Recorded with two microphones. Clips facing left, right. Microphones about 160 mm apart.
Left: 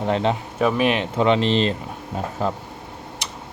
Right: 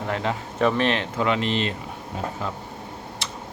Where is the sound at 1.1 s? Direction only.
25° left (ahead or behind).